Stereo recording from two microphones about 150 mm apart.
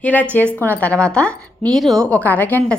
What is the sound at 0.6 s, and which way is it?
A woman's voice, 10° left (ahead or behind).